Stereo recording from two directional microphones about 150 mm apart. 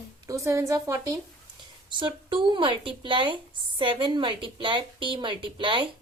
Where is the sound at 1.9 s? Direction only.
30° right (ahead or behind).